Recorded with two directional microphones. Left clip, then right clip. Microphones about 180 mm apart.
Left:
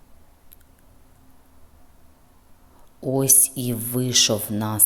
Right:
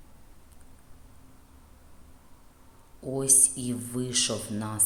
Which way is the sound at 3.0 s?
35° left (ahead or behind).